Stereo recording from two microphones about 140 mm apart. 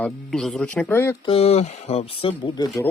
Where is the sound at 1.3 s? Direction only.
45° left (ahead or behind).